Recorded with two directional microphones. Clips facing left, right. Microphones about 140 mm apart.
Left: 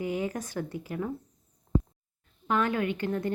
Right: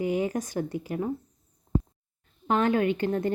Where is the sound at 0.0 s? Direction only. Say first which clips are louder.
Right 4 dB; 20° right (ahead or behind).